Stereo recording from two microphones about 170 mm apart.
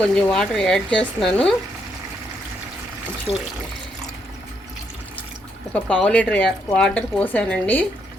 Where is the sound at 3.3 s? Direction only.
30° left (ahead or behind).